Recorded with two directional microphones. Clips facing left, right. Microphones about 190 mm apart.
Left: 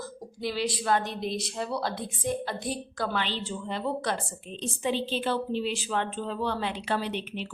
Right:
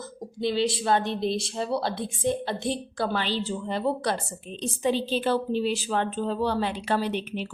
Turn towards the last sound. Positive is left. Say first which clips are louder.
# right 4 dB
turn(degrees=-40)  # may be behind; listen again after turning